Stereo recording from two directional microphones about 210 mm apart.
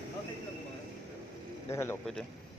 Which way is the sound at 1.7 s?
10° left (ahead or behind).